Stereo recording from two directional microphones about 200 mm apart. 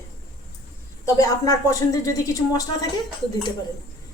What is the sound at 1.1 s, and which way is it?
A woman's voice, 15° left (ahead or behind).